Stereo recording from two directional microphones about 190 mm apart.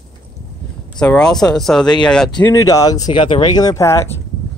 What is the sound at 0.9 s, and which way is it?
Speech, 5° left (ahead or behind).